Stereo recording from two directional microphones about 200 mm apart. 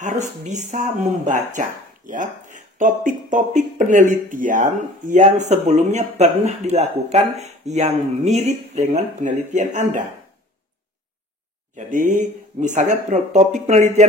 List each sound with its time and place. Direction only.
0.0 s speech: 35° right (ahead or behind)
11.7 s speech: 40° right (ahead or behind)